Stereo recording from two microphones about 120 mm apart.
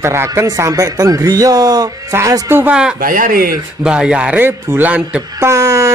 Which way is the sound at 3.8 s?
5° right (ahead or behind).